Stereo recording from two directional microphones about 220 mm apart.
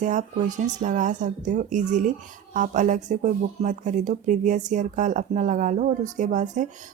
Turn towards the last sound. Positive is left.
turn(degrees=-35)  # may be behind; listen again after turning